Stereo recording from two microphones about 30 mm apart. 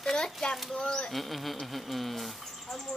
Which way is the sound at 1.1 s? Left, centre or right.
Centre.